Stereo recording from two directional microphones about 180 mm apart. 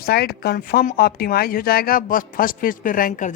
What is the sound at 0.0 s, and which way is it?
Speech, 60° left (ahead or behind).